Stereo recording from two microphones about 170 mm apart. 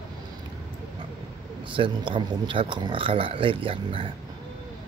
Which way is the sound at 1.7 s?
30° right (ahead or behind).